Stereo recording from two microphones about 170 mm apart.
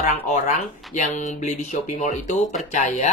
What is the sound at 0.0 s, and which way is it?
Speech, 45° left (ahead or behind).